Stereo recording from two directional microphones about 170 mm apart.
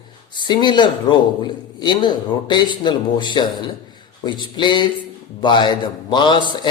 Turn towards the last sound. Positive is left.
turn(degrees=25)  # may be behind; listen again after turning